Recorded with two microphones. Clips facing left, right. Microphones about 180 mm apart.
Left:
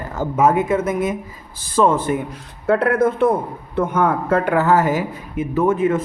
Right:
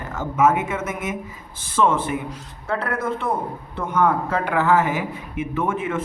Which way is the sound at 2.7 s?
55° left (ahead or behind).